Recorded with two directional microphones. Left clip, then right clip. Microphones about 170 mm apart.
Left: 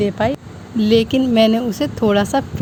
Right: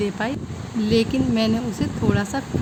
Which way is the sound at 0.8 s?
35° left (ahead or behind).